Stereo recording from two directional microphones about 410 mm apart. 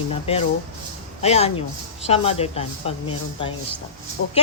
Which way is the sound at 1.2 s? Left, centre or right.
Centre.